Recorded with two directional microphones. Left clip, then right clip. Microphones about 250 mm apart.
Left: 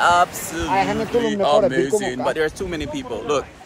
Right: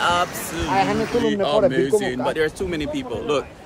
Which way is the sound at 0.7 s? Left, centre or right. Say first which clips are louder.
Left 1 dB; left.